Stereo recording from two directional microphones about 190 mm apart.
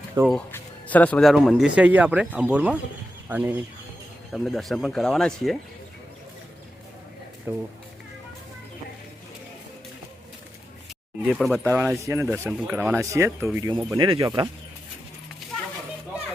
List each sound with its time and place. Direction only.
0.3 s speech: 5° left (ahead or behind)
7.5 s speech: 10° right (ahead or behind)
11.3 s speech: centre (ahead or behind); by 14.5 s 20° right (ahead or behind)